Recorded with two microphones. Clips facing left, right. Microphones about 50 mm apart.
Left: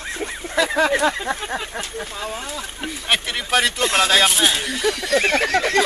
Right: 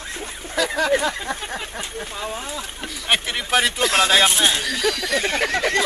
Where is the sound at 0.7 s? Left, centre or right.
Centre.